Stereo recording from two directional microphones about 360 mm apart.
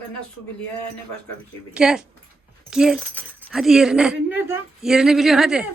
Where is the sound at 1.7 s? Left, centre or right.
Centre.